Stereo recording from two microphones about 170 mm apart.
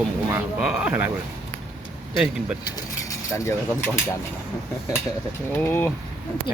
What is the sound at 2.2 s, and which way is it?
Speech, 5° right (ahead or behind).